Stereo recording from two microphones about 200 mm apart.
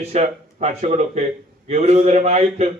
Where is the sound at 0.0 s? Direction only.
35° right (ahead or behind).